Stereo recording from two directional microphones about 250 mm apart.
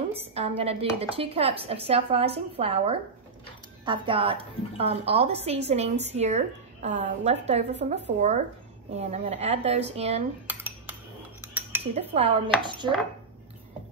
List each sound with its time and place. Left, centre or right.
0.1 s a woman's voice: right
10.4 s cutlery: centre
11.9 s a woman's voice: right